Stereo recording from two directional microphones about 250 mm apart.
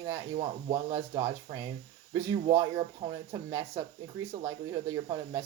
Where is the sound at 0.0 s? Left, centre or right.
Centre.